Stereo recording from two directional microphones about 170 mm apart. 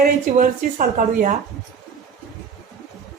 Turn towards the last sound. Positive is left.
turn(degrees=-45)  # may be behind; listen again after turning